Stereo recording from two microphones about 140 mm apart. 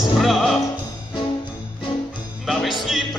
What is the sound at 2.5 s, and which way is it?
Music, centre (ahead or behind).